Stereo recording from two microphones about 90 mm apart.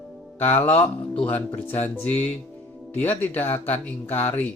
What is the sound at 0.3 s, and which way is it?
Speech, 25° left (ahead or behind).